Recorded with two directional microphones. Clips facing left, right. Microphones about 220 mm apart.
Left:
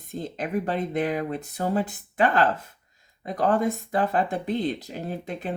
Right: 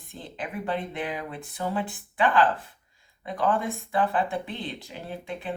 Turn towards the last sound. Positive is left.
turn(degrees=40)  # may be behind; listen again after turning